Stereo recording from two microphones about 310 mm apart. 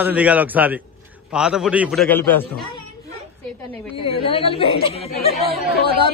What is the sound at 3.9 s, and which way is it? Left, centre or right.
A woman's voice, centre.